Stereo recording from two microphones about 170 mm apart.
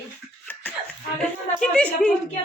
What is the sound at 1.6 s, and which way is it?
Speech, 5° left (ahead or behind).